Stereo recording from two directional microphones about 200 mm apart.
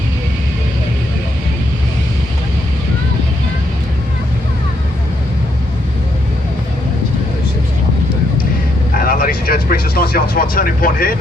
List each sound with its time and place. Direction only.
9.0 s speech: 45° left (ahead or behind)